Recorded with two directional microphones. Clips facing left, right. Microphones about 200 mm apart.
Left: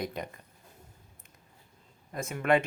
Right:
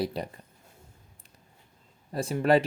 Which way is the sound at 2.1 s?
30° right (ahead or behind).